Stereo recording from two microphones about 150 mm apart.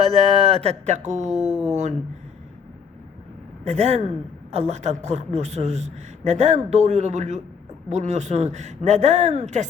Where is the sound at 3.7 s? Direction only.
45° right (ahead or behind).